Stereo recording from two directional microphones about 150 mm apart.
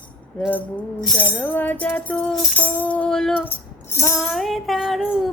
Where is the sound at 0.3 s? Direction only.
10° left (ahead or behind).